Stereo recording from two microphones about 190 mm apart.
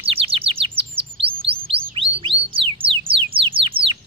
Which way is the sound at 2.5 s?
30° right (ahead or behind).